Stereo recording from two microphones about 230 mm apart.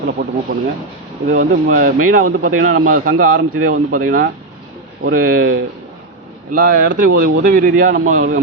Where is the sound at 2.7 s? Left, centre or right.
Right.